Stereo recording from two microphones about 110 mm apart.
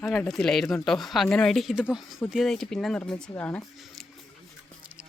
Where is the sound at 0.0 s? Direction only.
10° left (ahead or behind).